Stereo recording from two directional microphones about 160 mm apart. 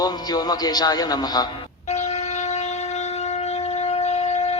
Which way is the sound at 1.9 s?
45° left (ahead or behind).